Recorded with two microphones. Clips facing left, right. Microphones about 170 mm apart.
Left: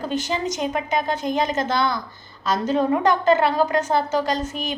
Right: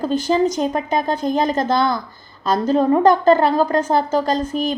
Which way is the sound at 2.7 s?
35° right (ahead or behind).